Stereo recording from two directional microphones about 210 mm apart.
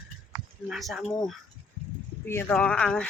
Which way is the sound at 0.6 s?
Centre (ahead or behind).